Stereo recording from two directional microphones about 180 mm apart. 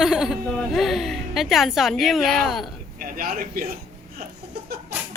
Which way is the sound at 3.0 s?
50° right (ahead or behind).